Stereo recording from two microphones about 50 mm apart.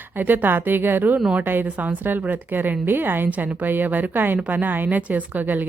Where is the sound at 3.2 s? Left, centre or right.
Right.